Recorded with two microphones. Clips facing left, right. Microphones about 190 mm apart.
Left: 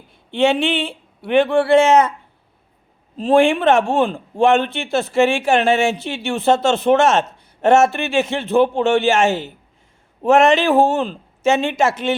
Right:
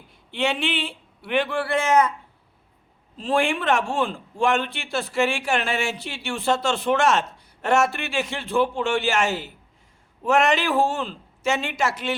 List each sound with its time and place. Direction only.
0.1 s speech: 25° left (ahead or behind)
3.2 s speech: 20° left (ahead or behind)